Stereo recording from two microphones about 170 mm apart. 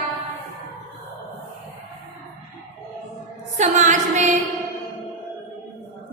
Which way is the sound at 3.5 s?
45° right (ahead or behind).